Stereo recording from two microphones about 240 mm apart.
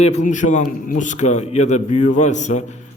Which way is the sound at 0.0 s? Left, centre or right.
Left.